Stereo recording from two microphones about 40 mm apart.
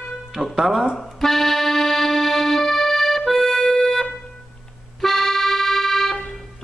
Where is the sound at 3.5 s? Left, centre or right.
Centre.